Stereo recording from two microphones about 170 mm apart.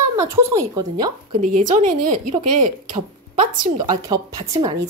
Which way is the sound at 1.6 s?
50° right (ahead or behind).